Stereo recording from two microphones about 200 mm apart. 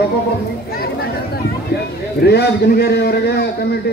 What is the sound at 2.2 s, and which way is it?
A man's voice, 55° left (ahead or behind).